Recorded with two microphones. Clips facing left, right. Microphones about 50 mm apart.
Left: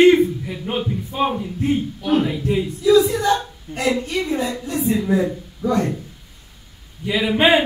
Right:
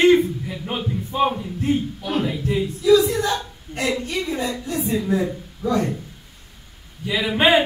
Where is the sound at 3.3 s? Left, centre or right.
Centre.